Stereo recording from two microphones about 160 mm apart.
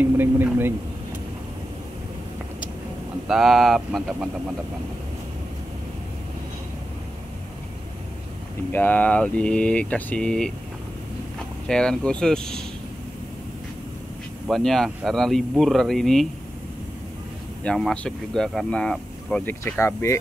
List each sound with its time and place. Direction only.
0.0 s speech: 15° right (ahead or behind)
3.3 s speech: centre (ahead or behind)
8.7 s speech: 10° left (ahead or behind)
11.6 s speech: 5° left (ahead or behind)
14.5 s speech: centre (ahead or behind)
17.6 s speech: 5° left (ahead or behind)
19.8 s speech: 15° left (ahead or behind)